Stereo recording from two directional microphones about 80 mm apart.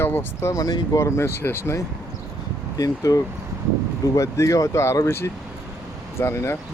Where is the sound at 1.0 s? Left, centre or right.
Left.